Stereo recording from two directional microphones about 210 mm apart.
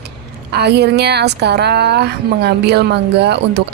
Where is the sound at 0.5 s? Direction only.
50° right (ahead or behind).